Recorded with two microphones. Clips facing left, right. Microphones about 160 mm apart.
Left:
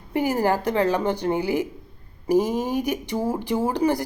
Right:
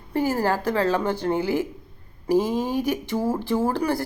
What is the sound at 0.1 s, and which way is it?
Speech, 15° left (ahead or behind).